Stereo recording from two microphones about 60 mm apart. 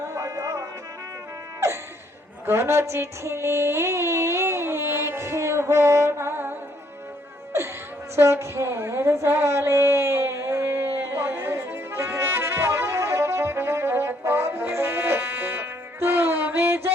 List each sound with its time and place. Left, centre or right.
0.1 s music: right
2.5 s female singing: right
8.1 s a sound: right